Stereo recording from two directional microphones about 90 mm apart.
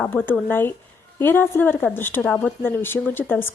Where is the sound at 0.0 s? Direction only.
20° left (ahead or behind).